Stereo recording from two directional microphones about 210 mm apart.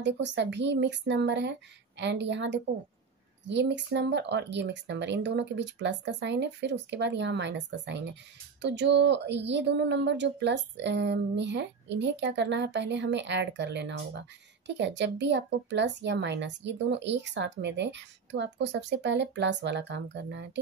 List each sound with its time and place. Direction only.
0.0 s speech: 55° right (ahead or behind)